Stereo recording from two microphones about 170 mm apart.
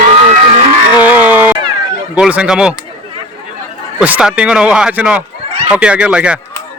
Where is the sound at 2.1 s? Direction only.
5° right (ahead or behind).